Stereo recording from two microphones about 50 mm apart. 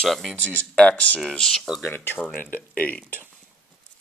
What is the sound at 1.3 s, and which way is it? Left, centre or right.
Speech, centre.